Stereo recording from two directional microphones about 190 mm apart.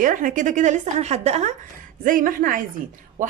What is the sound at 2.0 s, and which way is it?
Speech, 45° right (ahead or behind).